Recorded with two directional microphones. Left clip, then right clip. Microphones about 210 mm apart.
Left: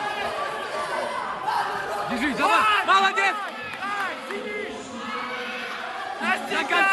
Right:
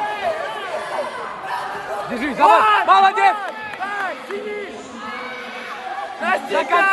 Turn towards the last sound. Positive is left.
turn(degrees=10)  # may be behind; listen again after turning